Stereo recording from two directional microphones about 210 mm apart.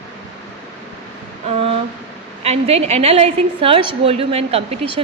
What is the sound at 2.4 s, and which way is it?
A woman's voice, 30° right (ahead or behind).